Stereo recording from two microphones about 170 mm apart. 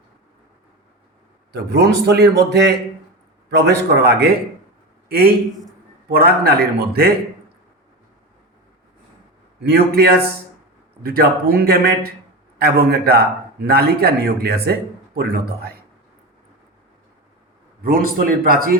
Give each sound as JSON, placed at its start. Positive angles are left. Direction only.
{"t": 1.5, "sound": "a man's voice", "side_deg": -80}
{"t": 9.6, "sound": "a man's voice", "side_deg": -65}
{"t": 17.8, "sound": "speech", "side_deg": -55}